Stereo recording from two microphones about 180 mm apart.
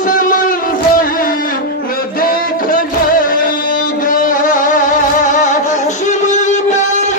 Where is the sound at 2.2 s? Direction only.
50° left (ahead or behind).